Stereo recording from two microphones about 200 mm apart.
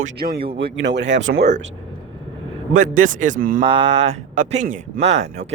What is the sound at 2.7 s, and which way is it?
Speech, 40° right (ahead or behind).